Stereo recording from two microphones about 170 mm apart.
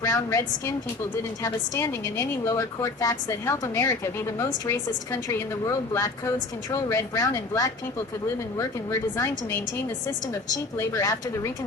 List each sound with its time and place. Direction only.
0.0 s a woman's voice: 15° left (ahead or behind)
1.5 s a woman's voice: 15° left (ahead or behind)